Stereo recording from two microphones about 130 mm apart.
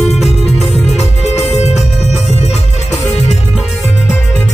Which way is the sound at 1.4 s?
60° left (ahead or behind).